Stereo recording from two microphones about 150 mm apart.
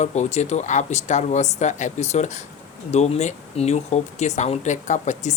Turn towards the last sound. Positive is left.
turn(degrees=50)  # may be behind; listen again after turning